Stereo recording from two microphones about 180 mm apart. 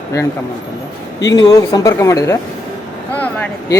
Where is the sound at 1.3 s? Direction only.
20° left (ahead or behind).